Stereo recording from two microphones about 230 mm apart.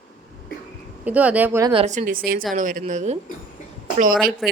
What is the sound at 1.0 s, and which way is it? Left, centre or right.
Speech, centre.